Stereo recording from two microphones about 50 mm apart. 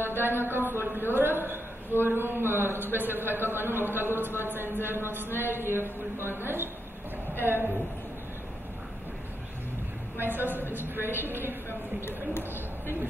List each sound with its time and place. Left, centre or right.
0.0 s a man's voice: right
10.2 s a man's voice: right